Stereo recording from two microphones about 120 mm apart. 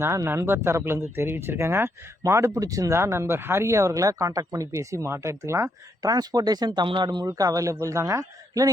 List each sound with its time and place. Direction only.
0.0 s speech: 25° right (ahead or behind)